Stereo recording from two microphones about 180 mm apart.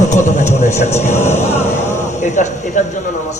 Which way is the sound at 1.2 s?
15° left (ahead or behind).